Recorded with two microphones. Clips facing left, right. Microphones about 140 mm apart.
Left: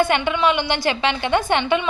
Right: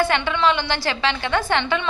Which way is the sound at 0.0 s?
20° left (ahead or behind).